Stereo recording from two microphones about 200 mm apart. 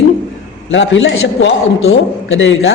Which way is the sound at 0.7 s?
70° left (ahead or behind).